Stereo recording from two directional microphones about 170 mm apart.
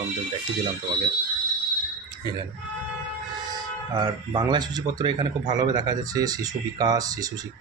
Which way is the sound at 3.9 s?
25° right (ahead or behind).